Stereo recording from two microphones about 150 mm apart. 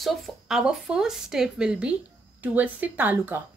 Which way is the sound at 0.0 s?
Centre (ahead or behind).